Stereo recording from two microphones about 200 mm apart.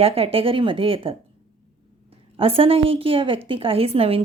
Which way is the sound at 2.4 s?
30° right (ahead or behind).